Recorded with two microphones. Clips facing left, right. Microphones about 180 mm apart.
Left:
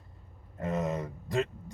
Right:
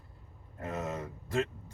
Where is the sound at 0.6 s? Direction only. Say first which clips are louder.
Left 5 dB; 20° left (ahead or behind).